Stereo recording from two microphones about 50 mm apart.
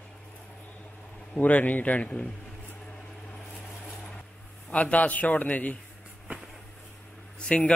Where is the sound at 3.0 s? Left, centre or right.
Left.